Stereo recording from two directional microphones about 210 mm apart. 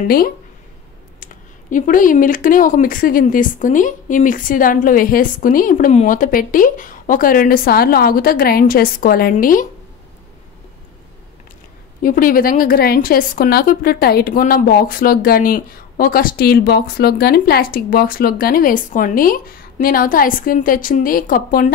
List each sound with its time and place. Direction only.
1.2 s speech: 40° left (ahead or behind)
12.0 s a woman's voice: 40° left (ahead or behind)